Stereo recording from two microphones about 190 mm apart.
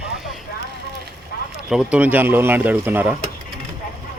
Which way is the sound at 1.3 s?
55° left (ahead or behind).